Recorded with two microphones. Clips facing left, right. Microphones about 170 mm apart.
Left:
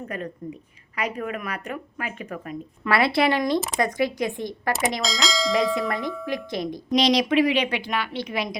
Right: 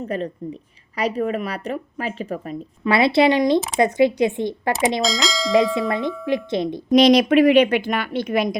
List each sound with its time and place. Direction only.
0.9 s speech: 30° right (ahead or behind)
5.0 s bell: centre (ahead or behind)
6.2 s speech: 25° right (ahead or behind)
6.9 s a woman's voice: 55° right (ahead or behind)